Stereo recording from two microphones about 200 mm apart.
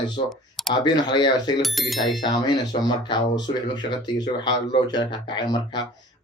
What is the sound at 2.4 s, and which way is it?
Speech, 20° left (ahead or behind).